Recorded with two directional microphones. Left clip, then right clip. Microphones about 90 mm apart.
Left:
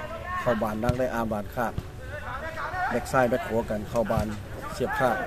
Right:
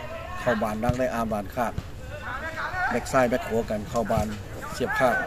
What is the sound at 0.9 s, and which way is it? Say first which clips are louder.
Speech: right 1 dB; 25° left (ahead or behind).